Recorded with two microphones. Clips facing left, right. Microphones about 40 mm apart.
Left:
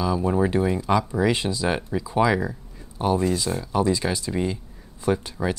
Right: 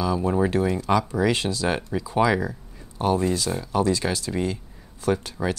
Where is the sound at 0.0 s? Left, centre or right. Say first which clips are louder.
Even; centre.